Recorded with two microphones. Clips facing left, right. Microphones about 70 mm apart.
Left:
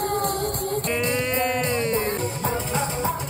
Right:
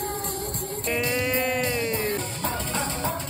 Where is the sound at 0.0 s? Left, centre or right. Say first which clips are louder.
Left 7 dB; left.